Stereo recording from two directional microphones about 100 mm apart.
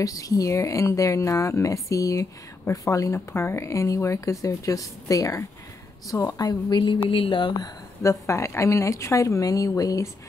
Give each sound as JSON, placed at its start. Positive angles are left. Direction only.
{"t": 0.0, "sound": "a woman's voice", "side_deg": 35}
{"t": 7.6, "sound": "speech", "side_deg": 30}